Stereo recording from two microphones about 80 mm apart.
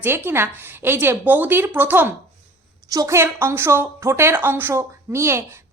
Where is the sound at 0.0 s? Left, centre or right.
Right.